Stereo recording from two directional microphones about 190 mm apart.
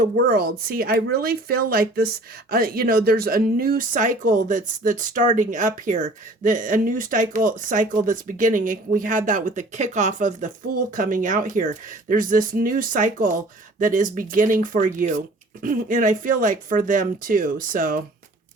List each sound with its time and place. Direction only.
0.0 s speech: 50° right (ahead or behind)